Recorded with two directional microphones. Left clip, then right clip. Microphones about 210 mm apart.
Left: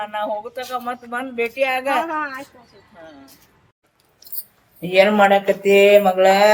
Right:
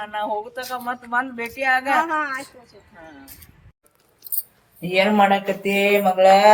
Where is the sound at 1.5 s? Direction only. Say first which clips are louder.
Right 2 dB; 25° left (ahead or behind).